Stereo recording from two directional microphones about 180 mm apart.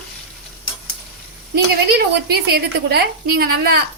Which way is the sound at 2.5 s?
60° right (ahead or behind).